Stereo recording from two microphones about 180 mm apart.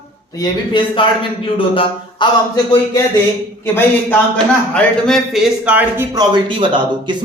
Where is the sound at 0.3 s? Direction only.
25° left (ahead or behind).